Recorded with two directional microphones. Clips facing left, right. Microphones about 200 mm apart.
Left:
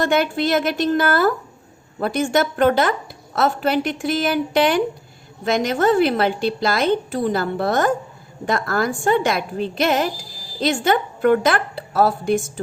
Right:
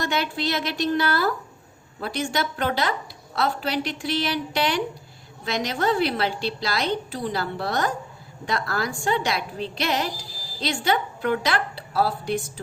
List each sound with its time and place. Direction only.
0.0 s a woman's voice: 50° left (ahead or behind)